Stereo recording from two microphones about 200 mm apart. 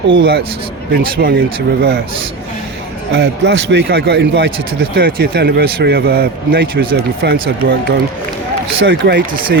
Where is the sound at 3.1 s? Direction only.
65° right (ahead or behind).